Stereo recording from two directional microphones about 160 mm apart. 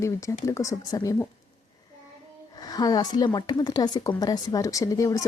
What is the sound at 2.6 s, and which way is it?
Speech, 25° left (ahead or behind).